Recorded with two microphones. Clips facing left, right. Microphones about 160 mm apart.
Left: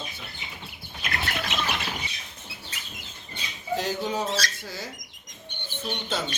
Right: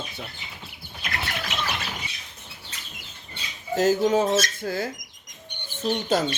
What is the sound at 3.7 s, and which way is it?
Speech, 45° right (ahead or behind).